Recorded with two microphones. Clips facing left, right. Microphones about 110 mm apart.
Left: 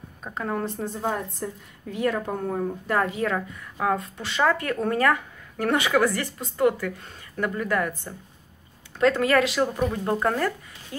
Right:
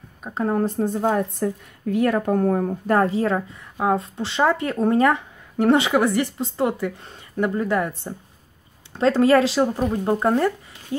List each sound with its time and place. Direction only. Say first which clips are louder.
0.3 s a woman's voice: right 6 dB; 30° right (ahead or behind)
0.9 s a woman's voice: right 7 dB; 55° right (ahead or behind)
3.0 s a woman's voice: right 3 dB; 30° right (ahead or behind)